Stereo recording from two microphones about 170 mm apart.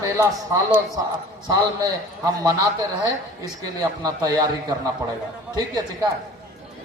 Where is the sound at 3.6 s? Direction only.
20° right (ahead or behind).